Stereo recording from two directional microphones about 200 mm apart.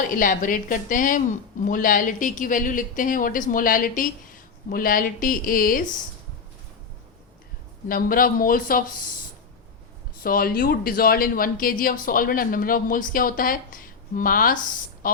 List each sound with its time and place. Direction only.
0.1 s speech: 40° left (ahead or behind)
7.9 s speech: 45° left (ahead or behind)
10.2 s speech: 45° left (ahead or behind)
15.0 s a sound: 45° left (ahead or behind)